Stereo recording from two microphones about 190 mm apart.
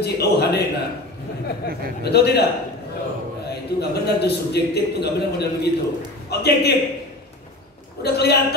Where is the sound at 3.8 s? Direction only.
60° left (ahead or behind).